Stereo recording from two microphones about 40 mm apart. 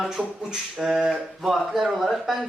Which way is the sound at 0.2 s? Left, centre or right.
Right.